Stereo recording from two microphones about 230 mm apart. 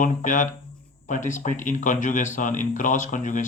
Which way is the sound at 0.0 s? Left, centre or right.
Left.